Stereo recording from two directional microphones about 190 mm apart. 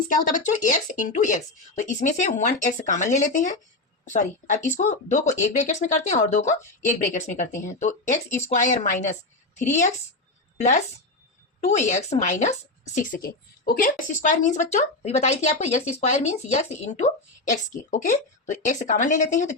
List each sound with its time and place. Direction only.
0.1 s a woman's voice: 40° left (ahead or behind)
10.6 s a woman's voice: 40° left (ahead or behind)